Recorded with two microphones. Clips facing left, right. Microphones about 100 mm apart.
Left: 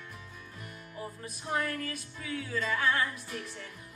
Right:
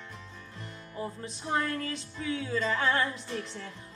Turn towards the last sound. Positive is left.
turn(degrees=-25)  # may be behind; listen again after turning